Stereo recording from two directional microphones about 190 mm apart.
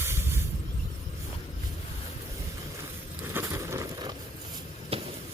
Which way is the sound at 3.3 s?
15° right (ahead or behind).